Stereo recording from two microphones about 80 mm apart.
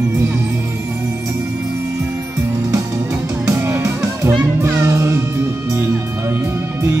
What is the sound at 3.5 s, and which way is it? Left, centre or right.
Music, right.